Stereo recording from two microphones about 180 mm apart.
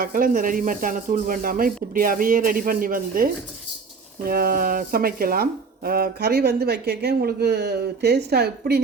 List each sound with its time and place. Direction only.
0.0 s speech: 50° right (ahead or behind)